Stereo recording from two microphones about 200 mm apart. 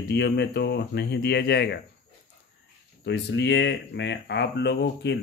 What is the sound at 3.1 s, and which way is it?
Speech, 60° left (ahead or behind).